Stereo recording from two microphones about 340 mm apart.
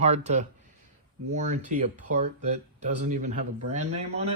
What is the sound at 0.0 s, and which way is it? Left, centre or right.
Speech, centre.